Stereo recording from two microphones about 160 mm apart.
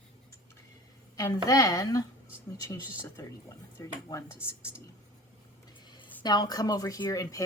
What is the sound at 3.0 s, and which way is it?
A woman's voice, 20° left (ahead or behind).